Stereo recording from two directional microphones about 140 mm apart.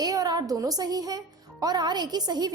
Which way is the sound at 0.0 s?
25° right (ahead or behind).